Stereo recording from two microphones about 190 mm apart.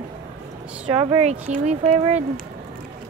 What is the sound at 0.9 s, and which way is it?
Speech, 25° right (ahead or behind).